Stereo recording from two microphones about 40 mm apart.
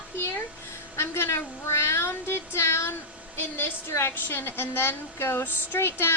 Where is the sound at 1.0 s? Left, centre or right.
Left.